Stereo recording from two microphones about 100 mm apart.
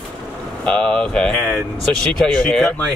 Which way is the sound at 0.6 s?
5° left (ahead or behind).